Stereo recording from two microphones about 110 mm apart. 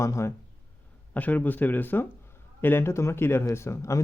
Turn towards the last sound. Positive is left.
turn(degrees=25)  # may be behind; listen again after turning